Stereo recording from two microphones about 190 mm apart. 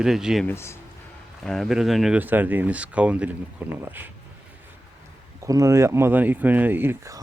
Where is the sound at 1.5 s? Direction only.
Centre (ahead or behind).